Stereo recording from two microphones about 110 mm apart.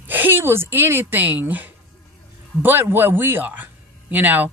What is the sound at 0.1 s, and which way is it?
Speech, 20° right (ahead or behind).